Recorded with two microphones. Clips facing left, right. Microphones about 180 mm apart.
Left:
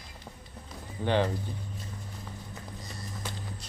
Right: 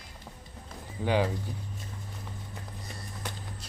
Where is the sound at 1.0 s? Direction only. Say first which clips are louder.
Even; 5° right (ahead or behind).